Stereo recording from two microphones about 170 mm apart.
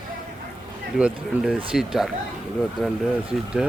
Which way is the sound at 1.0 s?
5° right (ahead or behind).